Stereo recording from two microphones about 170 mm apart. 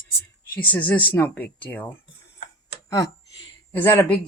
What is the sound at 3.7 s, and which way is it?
Speech, 15° left (ahead or behind).